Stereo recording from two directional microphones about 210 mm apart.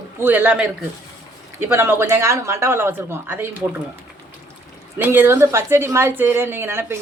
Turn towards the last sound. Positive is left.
turn(degrees=-10)  # may be behind; listen again after turning